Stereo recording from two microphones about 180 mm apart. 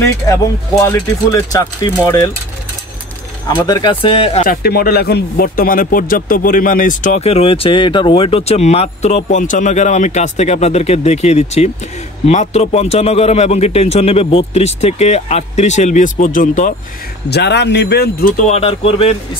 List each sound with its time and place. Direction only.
0.0 s speech: 15° left (ahead or behind)
3.5 s speech: 25° left (ahead or behind)
4.5 s speech: 60° left (ahead or behind)
17.3 s speech: 70° left (ahead or behind)
18.5 s speech: 35° left (ahead or behind)